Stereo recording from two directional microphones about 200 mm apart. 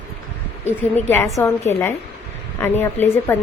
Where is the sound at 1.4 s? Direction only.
15° left (ahead or behind).